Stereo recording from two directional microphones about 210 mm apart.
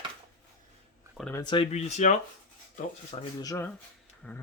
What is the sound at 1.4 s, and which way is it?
Speech, 25° left (ahead or behind).